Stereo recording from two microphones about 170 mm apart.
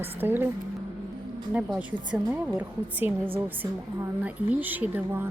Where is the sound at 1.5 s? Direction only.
10° right (ahead or behind).